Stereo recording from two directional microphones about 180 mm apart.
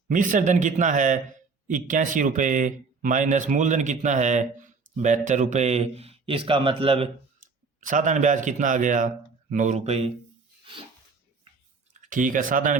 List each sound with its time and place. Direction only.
0.1 s speech: 45° right (ahead or behind); by 7.1 s 30° right (ahead or behind)
7.8 s speech: 45° right (ahead or behind)
12.0 s speech: 45° right (ahead or behind)